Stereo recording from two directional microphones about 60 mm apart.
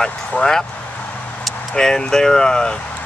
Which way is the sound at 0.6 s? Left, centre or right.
Left.